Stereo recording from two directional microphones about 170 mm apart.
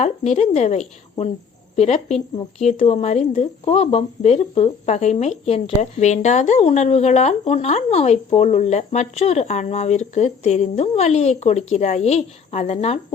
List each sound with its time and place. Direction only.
0.0 s a woman's voice: 40° left (ahead or behind)